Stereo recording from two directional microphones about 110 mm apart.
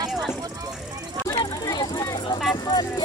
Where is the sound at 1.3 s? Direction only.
35° left (ahead or behind).